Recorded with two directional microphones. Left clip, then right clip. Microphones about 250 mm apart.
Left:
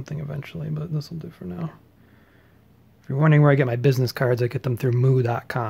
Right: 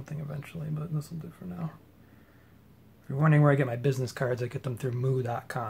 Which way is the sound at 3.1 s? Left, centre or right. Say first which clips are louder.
Left 6 dB; left.